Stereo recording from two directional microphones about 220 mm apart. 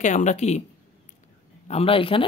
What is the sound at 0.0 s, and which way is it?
Speech, 35° left (ahead or behind).